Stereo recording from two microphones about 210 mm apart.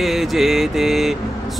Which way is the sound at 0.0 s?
Centre (ahead or behind).